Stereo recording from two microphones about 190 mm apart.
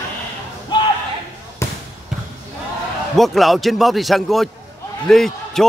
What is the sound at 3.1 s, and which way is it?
A man's voice, centre (ahead or behind).